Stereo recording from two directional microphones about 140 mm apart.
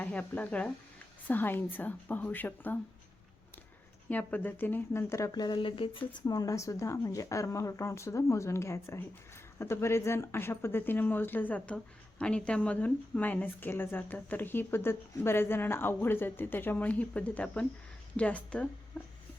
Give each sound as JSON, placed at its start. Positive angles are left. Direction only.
{"t": 0.0, "sound": "speech", "side_deg": 10}
{"t": 4.1, "sound": "speech", "side_deg": 10}